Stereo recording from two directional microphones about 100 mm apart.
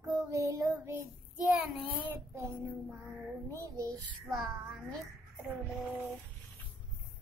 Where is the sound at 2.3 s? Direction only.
30° right (ahead or behind).